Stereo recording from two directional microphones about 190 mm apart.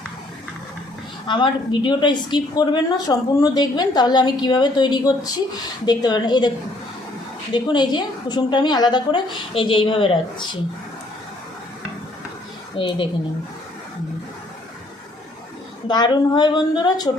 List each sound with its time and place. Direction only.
1.3 s a woman's voice: 25° left (ahead or behind)
7.5 s a woman's voice: 25° left (ahead or behind)
12.7 s a woman's voice: 25° left (ahead or behind)
15.9 s a woman's voice: 20° left (ahead or behind)